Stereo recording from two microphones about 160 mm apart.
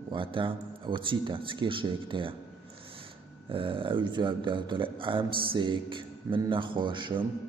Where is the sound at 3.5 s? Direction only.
35° right (ahead or behind).